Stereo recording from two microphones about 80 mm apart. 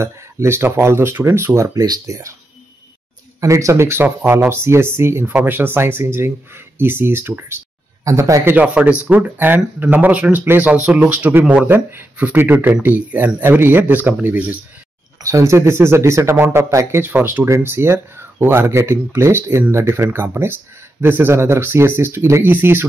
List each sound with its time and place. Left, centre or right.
0.0 s speech: right
3.3 s speech: right
8.0 s a man's voice: right
8.5 s speech: centre
15.1 s speech: right